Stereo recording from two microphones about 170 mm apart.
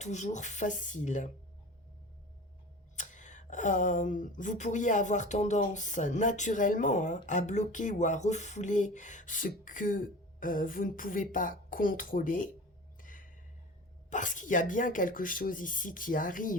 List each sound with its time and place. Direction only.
0.0 s speech: 45° left (ahead or behind)
2.9 s speech: 45° left (ahead or behind)
13.0 s a sound: 50° left (ahead or behind)
14.1 s speech: 45° left (ahead or behind)